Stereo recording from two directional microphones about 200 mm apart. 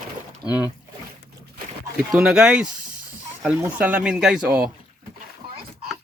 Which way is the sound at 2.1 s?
5° right (ahead or behind).